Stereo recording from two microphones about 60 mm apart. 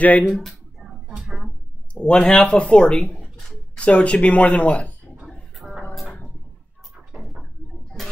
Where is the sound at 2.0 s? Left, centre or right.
Centre.